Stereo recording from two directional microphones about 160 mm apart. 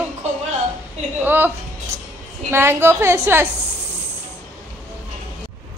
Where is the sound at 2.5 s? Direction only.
15° right (ahead or behind).